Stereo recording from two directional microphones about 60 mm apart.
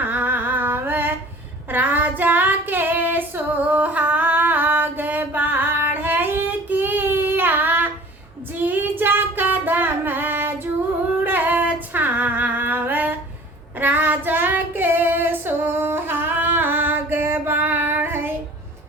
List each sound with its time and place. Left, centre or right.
0.0 s humming: right
1.7 s female singing: right
13.7 s child singing: right